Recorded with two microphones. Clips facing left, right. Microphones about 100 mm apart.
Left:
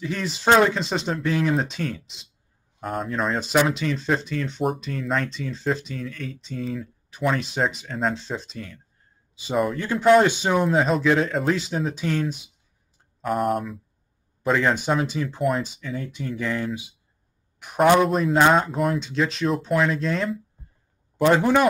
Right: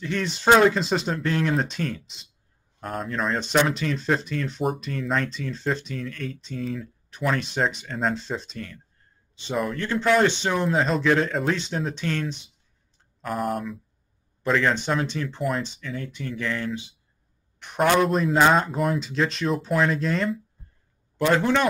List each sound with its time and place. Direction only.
0.0 s speech: 5° left (ahead or behind)
21.3 s speech: 10° left (ahead or behind)